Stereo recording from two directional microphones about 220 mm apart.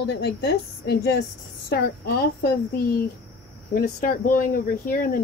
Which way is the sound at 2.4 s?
45° left (ahead or behind).